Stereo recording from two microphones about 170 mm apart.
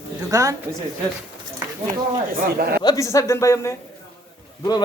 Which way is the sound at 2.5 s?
65° right (ahead or behind).